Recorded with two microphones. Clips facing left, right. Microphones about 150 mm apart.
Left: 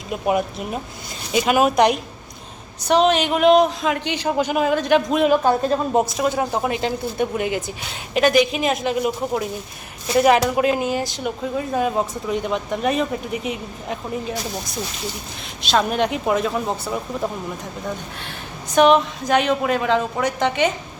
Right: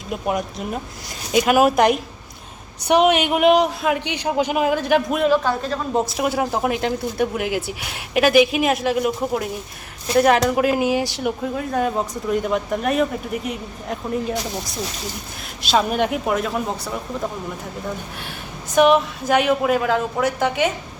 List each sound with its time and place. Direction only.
0.1 s a woman's voice: 5° left (ahead or behind)
5.2 s a woman's voice: 15° left (ahead or behind)
6.1 s speech: 5° right (ahead or behind)
15.6 s speech: 5° right (ahead or behind)
18.7 s a woman's voice: 5° right (ahead or behind)